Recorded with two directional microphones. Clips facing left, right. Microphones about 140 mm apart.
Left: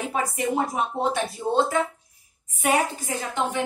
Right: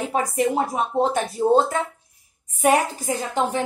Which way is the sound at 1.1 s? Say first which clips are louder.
Right 5 dB; 45° right (ahead or behind).